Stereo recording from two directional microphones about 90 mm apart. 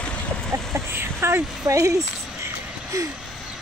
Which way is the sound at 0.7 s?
30° right (ahead or behind).